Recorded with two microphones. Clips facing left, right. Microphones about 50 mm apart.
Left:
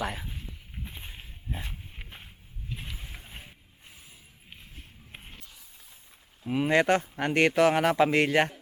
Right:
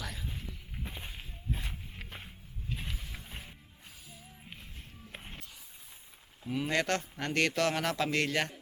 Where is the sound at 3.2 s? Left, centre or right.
Centre.